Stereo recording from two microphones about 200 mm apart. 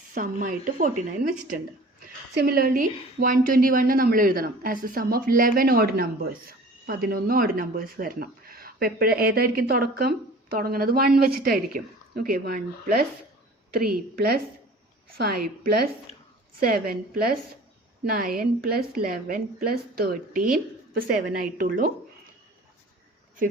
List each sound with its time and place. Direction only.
0.1 s speech: 40° right (ahead or behind)
2.3 s speech: 50° right (ahead or behind)